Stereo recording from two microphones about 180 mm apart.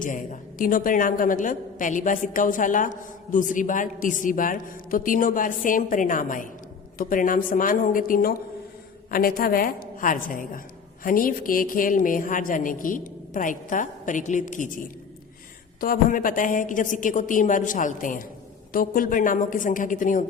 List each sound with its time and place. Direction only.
0.0 s a woman's voice: 45° left (ahead or behind)
15.8 s a woman's voice: 50° left (ahead or behind)